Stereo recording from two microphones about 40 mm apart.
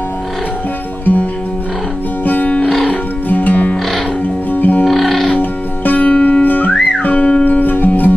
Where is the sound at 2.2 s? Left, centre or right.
Left.